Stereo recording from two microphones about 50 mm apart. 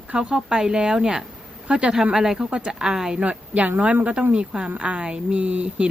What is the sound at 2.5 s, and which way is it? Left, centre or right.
Speech, right.